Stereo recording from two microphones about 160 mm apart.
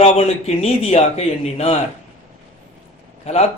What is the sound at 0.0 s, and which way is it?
A man's voice, 45° left (ahead or behind).